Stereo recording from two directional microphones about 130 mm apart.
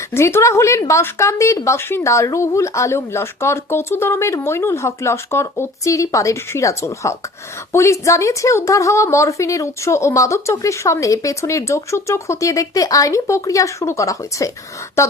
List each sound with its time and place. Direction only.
0.1 s speech: 20° left (ahead or behind)